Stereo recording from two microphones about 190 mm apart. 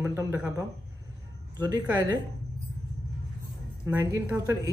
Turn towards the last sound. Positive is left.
turn(degrees=-20)  # may be behind; listen again after turning